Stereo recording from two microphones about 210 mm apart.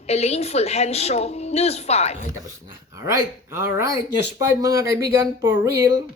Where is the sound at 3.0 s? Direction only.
15° right (ahead or behind).